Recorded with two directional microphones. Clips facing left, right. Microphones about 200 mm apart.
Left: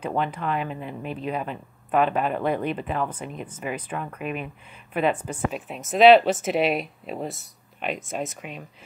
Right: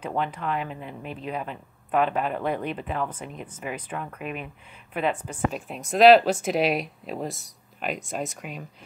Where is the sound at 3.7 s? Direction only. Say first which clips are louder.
Left 2 dB; 65° left (ahead or behind).